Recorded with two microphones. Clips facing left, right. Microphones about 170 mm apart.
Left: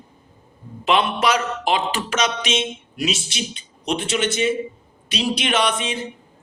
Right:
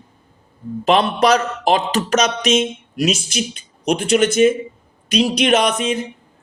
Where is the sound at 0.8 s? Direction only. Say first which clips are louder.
Right 4 dB; 40° right (ahead or behind).